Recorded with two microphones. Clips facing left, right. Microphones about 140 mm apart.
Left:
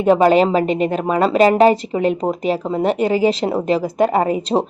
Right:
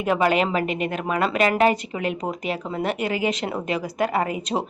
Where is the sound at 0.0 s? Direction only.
30° left (ahead or behind).